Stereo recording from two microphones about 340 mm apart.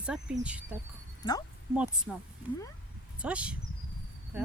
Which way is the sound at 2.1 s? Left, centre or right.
Centre.